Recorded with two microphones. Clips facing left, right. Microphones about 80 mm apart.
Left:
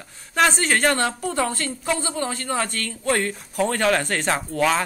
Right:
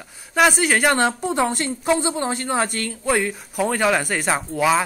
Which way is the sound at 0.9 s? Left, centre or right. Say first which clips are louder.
Right 3 dB; right.